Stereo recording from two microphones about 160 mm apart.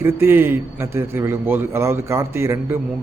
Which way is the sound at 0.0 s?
15° right (ahead or behind).